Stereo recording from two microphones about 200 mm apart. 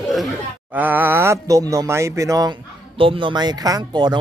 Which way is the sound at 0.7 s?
10° right (ahead or behind).